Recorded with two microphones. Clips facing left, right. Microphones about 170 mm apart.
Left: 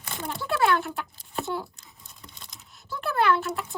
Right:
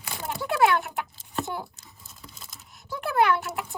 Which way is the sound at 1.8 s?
Centre (ahead or behind).